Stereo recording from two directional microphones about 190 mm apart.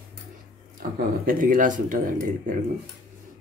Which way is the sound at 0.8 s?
50° right (ahead or behind).